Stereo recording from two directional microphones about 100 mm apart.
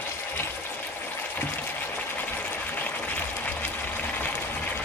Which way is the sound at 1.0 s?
20° left (ahead or behind).